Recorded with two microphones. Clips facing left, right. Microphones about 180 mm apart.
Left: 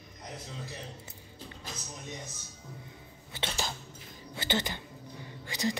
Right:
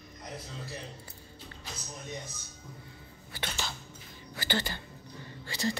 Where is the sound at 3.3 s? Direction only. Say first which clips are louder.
Left 2 dB; 25° left (ahead or behind).